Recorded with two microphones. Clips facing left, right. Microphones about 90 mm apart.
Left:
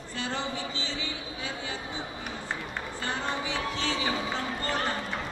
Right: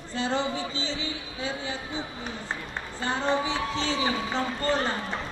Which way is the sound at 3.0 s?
25° right (ahead or behind).